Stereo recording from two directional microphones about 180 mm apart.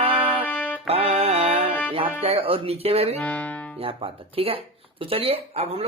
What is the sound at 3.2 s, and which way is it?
Music, 5° left (ahead or behind).